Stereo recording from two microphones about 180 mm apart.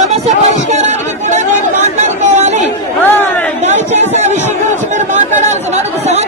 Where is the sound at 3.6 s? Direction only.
40° right (ahead or behind).